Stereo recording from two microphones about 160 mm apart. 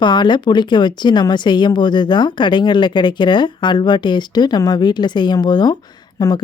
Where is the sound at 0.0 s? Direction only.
30° left (ahead or behind).